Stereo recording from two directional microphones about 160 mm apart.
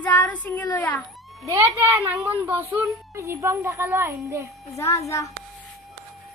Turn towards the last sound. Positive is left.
turn(degrees=20)  # may be behind; listen again after turning